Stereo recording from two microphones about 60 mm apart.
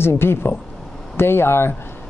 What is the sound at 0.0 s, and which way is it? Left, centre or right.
Speech, left.